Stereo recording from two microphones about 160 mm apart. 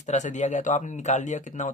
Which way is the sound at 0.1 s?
45° left (ahead or behind).